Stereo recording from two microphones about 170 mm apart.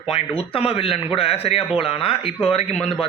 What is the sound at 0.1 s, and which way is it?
Speech, 35° left (ahead or behind).